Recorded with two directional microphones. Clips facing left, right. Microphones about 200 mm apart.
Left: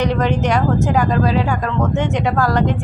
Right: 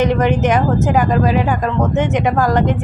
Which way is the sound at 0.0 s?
20° right (ahead or behind).